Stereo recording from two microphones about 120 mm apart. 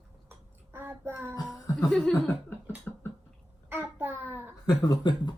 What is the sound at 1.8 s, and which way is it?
Speech, centre (ahead or behind).